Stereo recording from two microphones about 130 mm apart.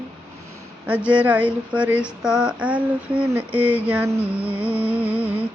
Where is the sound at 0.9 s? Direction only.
10° right (ahead or behind).